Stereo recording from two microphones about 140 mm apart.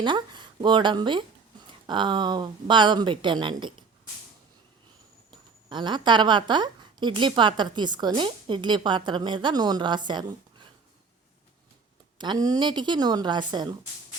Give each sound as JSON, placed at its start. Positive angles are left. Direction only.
{"t": 0.0, "sound": "a woman's voice", "side_deg": -35}
{"t": 5.3, "sound": "a woman's voice", "side_deg": -35}
{"t": 12.1, "sound": "a woman's voice", "side_deg": -35}